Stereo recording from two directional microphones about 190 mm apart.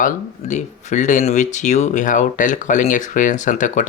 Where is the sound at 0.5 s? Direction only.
40° left (ahead or behind).